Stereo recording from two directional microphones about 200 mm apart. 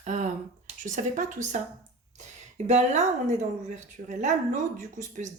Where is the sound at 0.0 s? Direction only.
35° right (ahead or behind).